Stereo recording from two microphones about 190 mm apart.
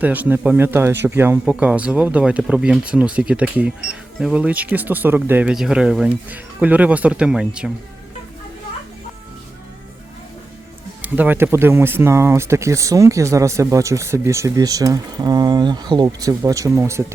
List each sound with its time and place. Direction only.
0.0 s speech: 10° right (ahead or behind)
11.0 s speech: 10° right (ahead or behind)